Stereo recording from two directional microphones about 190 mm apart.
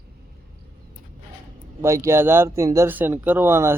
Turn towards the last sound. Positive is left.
turn(degrees=-10)  # may be behind; listen again after turning